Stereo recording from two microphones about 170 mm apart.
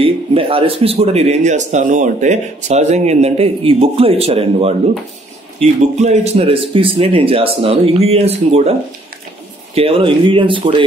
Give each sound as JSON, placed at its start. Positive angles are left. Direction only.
{"t": 0.0, "sound": "a man's voice", "side_deg": -35}
{"t": 5.9, "sound": "a man's voice", "side_deg": -40}
{"t": 9.8, "sound": "speech", "side_deg": -35}